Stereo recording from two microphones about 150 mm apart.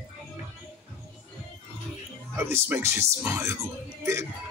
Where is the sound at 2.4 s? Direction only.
15° right (ahead or behind).